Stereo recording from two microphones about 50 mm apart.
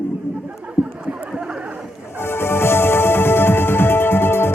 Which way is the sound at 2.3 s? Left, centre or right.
Left.